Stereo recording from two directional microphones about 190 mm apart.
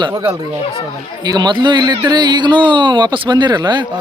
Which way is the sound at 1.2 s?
20° right (ahead or behind).